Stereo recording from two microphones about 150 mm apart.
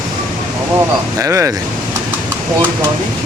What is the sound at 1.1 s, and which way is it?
Speech, 20° right (ahead or behind).